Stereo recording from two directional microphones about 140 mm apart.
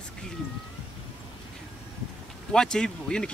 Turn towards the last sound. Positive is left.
turn(degrees=5)  # may be behind; listen again after turning